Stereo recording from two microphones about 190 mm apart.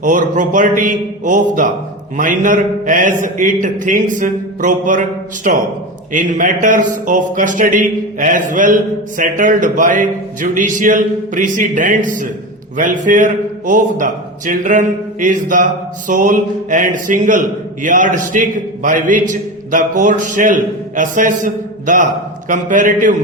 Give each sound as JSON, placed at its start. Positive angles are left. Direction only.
{"t": 0.0, "sound": "a man's voice", "side_deg": -45}